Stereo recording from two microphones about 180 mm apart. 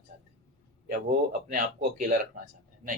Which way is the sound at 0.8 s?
50° right (ahead or behind).